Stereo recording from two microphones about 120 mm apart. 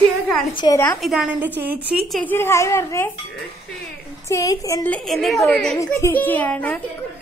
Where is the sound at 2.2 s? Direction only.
15° left (ahead or behind).